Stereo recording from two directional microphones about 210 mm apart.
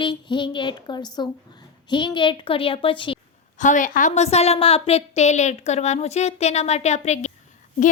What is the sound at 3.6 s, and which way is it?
A woman's voice, 35° left (ahead or behind).